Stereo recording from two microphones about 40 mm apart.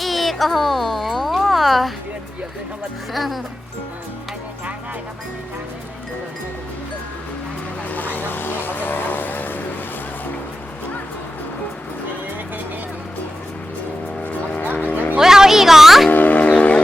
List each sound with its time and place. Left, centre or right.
0.0 s a sound: centre
3.1 s speech: centre
7.9 s vehicle: left
14.5 s music: left
15.2 s music: centre
16.0 s a sound: left